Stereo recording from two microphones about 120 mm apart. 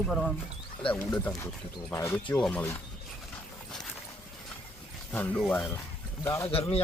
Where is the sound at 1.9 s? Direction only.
25° left (ahead or behind).